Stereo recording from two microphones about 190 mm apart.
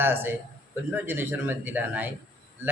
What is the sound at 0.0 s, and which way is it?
A man's voice, 10° right (ahead or behind).